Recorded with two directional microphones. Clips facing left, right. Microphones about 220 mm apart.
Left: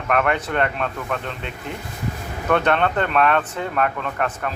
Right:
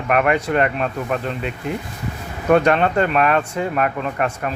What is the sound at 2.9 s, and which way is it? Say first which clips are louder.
A man's voice: right 2 dB; 10° right (ahead or behind).